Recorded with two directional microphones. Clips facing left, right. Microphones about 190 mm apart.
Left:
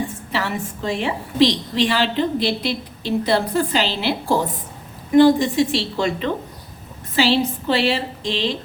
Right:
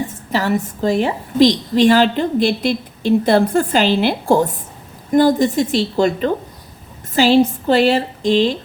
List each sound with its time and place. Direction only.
0.3 s a woman's voice: 40° right (ahead or behind)